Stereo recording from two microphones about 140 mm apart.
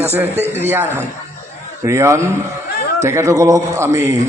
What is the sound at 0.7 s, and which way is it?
A man's voice, 15° right (ahead or behind).